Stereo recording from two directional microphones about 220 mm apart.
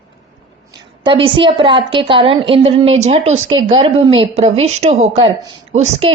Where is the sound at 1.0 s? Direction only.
20° right (ahead or behind).